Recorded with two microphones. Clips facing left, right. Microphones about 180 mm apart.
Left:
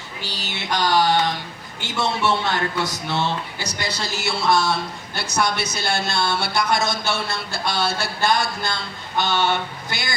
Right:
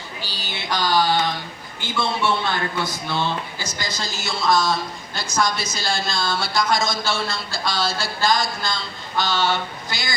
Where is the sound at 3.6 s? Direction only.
65° left (ahead or behind).